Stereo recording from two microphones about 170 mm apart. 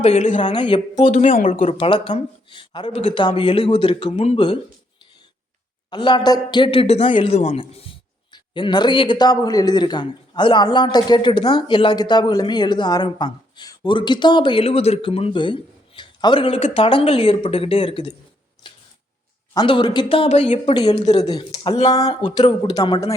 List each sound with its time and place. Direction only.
0.0 s speech: 40° left (ahead or behind)
0.3 s a man's voice: 30° left (ahead or behind)
1.1 s speech: 50° left (ahead or behind)
1.5 s speech: 30° left (ahead or behind)
5.9 s a man's voice: 25° left (ahead or behind)
19.5 s a man's voice: 25° left (ahead or behind)